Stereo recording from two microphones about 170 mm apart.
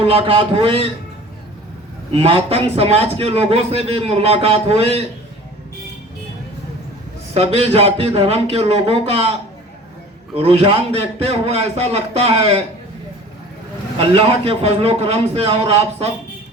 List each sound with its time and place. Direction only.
0.0 s a man's voice: 35° right (ahead or behind)
2.1 s a man's voice: 35° right (ahead or behind)
7.3 s a man's voice: 35° right (ahead or behind)
10.3 s a man's voice: 35° right (ahead or behind)
14.2 s a man's voice: 35° right (ahead or behind)